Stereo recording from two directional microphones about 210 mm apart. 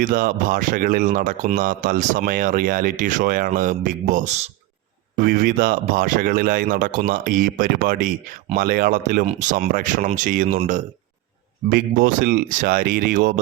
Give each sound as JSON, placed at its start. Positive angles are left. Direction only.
{"t": 0.0, "sound": "speech", "side_deg": -40}
{"t": 5.1, "sound": "speech", "side_deg": -45}